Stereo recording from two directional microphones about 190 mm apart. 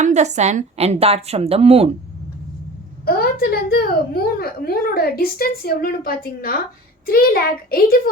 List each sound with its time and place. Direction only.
0.0 s a woman's voice: 35° right (ahead or behind)
3.1 s a woman's voice: 50° left (ahead or behind)